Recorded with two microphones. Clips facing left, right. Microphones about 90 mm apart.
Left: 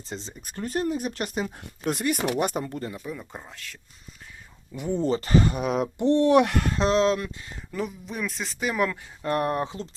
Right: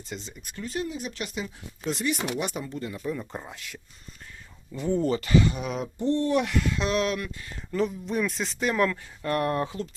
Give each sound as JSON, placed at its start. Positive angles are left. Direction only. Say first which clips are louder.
{"t": 0.0, "sound": "speech", "louder": "left 1 dB", "side_deg": 30}
{"t": 3.0, "sound": "speech", "louder": "right 4 dB", "side_deg": 0}
{"t": 3.5, "sound": "speech", "louder": "right 1 dB", "side_deg": -15}
{"t": 4.7, "sound": "speech", "louder": "right 1 dB", "side_deg": 15}
{"t": 5.0, "sound": "speech", "louder": "left 2 dB", "side_deg": 35}
{"t": 6.7, "sound": "speech", "louder": "left 8 dB", "side_deg": 35}
{"t": 7.7, "sound": "speech", "louder": "right 5 dB", "side_deg": 5}